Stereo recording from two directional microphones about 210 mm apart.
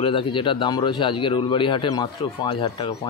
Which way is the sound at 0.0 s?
25° left (ahead or behind).